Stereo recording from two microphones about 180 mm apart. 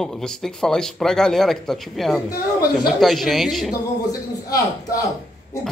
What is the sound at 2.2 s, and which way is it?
Speech, 20° left (ahead or behind).